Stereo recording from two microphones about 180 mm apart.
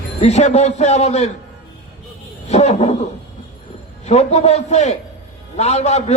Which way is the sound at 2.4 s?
40° left (ahead or behind).